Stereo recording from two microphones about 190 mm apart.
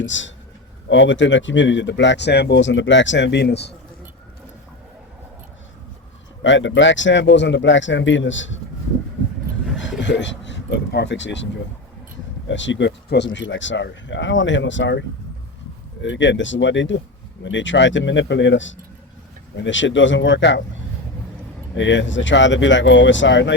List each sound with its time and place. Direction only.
0.0 s speech: 75° left (ahead or behind); by 3.8 s 60° left (ahead or behind)
6.4 s speech: 75° left (ahead or behind)
10.0 s speech: 70° left (ahead or behind)
12.5 s speech: 75° left (ahead or behind)
21.8 s speech: 75° left (ahead or behind)